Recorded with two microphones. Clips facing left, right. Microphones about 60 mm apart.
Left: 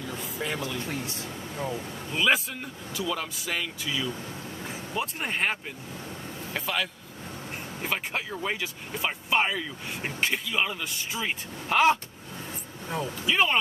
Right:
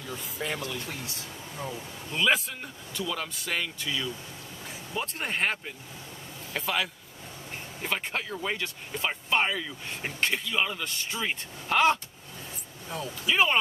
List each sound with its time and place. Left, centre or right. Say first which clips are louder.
0.1 s speech: even; centre
0.7 s speech: left 4 dB; left
2.0 s speech: left 1 dB; centre
12.8 s speech: left 4 dB; left
13.3 s speech: even; centre